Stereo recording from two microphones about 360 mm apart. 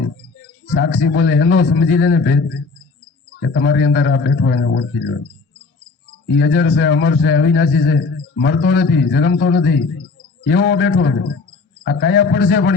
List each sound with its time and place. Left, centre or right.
0.6 s a man's voice: left
6.2 s a man's voice: left